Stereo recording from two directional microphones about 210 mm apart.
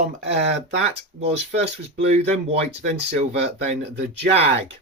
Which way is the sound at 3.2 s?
30° right (ahead or behind).